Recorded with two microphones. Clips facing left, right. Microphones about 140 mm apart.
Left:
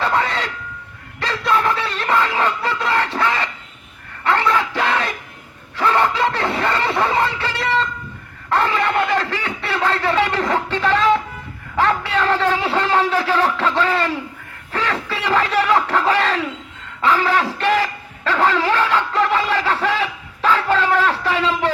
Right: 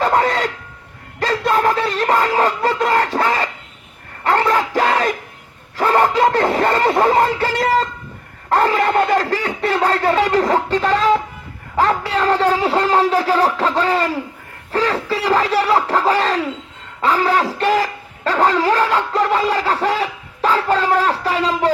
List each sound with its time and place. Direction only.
0.0 s a sound: 40° right (ahead or behind)
11.8 s a man's voice: 40° right (ahead or behind)
17.8 s bow-wow: 35° right (ahead or behind)
18.6 s speech: 40° right (ahead or behind)
19.9 s snicker: 40° right (ahead or behind)
20.7 s speech: 40° right (ahead or behind)